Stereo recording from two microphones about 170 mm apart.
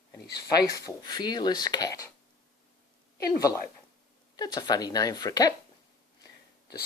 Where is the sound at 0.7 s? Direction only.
25° left (ahead or behind).